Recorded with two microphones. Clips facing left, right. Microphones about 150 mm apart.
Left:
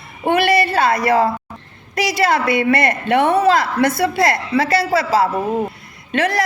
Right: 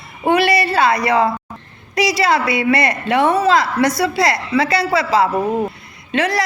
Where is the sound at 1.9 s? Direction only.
50° left (ahead or behind).